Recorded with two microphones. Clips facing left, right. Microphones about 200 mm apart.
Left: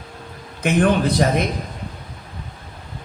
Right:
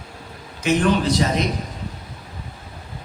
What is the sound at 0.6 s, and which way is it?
Speech, 55° left (ahead or behind).